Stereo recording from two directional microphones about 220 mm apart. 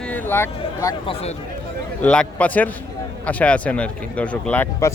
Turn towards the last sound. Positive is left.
turn(degrees=10)  # may be behind; listen again after turning